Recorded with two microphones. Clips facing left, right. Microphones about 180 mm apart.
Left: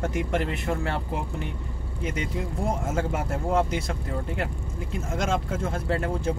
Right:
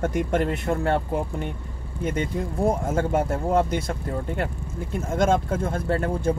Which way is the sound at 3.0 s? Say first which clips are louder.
Right 5 dB; 45° right (ahead or behind).